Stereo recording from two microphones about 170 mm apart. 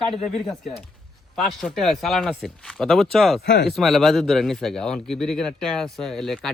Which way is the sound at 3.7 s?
Centre (ahead or behind).